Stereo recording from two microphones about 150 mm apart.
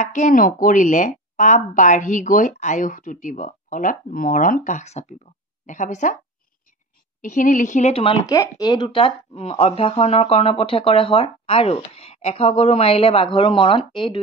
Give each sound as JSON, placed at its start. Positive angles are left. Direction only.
{"t": 0.0, "sound": "a woman's voice", "side_deg": 55}
{"t": 7.2, "sound": "a woman's voice", "side_deg": 60}
{"t": 7.9, "sound": "speech", "side_deg": 40}
{"t": 8.3, "sound": "speech", "side_deg": 25}